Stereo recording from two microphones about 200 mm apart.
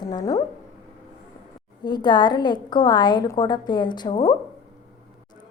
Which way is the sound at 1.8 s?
20° left (ahead or behind).